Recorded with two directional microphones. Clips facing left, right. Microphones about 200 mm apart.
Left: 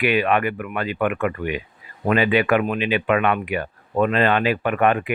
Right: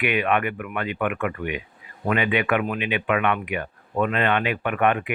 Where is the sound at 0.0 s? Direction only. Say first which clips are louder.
Left 3 dB; 35° left (ahead or behind).